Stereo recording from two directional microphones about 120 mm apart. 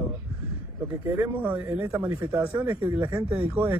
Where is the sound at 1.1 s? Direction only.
15° right (ahead or behind).